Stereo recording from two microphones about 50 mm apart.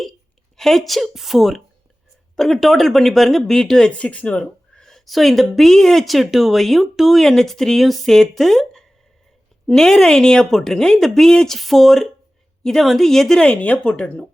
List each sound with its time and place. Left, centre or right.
0.5 s a woman's voice: centre
2.3 s speech: centre
3.9 s a woman's voice: left; by 13.4 s centre
13.4 s speech: left